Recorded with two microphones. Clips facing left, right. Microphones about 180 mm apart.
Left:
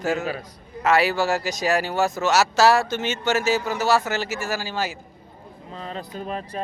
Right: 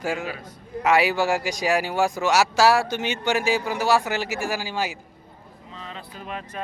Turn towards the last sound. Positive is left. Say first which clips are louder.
# left 4 dB
turn(degrees=35)  # may be behind; listen again after turning